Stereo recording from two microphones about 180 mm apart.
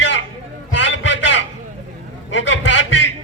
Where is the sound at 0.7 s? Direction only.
90° left.